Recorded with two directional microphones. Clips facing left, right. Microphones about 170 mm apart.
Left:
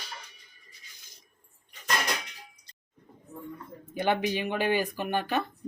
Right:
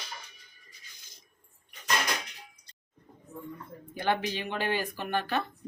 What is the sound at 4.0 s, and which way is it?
Speech, 15° left (ahead or behind).